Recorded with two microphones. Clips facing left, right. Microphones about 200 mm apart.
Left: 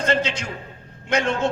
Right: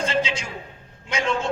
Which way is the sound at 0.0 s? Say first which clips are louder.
Left 2 dB; 60° left (ahead or behind).